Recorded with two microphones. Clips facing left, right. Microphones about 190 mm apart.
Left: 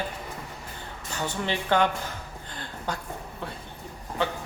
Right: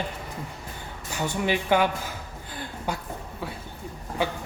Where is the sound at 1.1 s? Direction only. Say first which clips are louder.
Right 4 dB; 10° right (ahead or behind).